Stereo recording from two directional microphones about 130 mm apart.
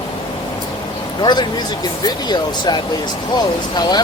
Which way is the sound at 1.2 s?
35° left (ahead or behind).